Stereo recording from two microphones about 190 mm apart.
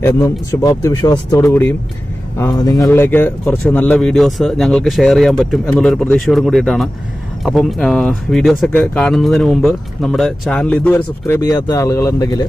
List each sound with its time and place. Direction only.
0.0 s speech: 15° left (ahead or behind)